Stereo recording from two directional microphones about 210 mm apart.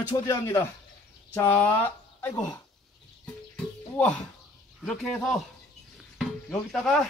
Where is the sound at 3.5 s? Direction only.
5° left (ahead or behind).